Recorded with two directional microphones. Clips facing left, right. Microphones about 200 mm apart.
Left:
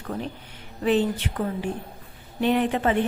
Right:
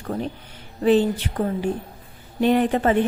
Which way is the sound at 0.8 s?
35° right (ahead or behind).